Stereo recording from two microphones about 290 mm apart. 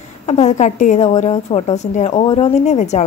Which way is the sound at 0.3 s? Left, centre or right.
Left.